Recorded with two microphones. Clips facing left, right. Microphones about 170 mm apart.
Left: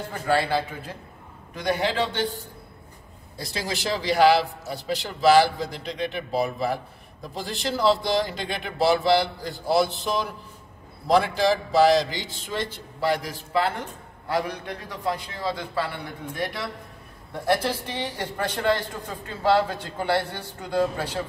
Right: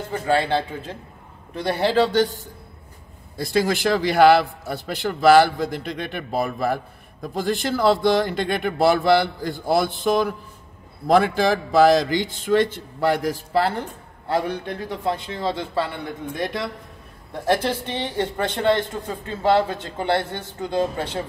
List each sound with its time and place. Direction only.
0.4 s a man's voice: 25° right (ahead or behind); by 2.4 s 40° right (ahead or behind)
3.3 s a man's voice: 55° right (ahead or behind); by 21.2 s 25° right (ahead or behind)